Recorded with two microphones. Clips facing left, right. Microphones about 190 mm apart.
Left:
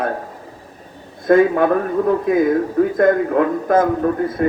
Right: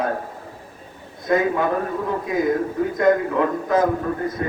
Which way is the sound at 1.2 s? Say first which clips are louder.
Left 7 dB; 55° left (ahead or behind).